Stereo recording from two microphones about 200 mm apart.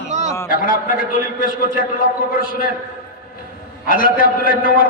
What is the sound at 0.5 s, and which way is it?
A man's voice, 45° left (ahead or behind).